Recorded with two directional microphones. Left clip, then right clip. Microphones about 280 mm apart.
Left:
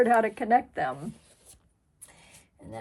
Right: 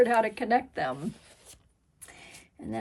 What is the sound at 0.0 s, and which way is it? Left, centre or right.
Speech, centre.